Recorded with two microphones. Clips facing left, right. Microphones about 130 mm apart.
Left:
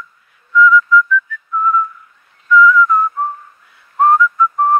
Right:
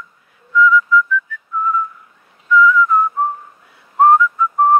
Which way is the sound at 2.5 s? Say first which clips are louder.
Left 2 dB; 10° right (ahead or behind).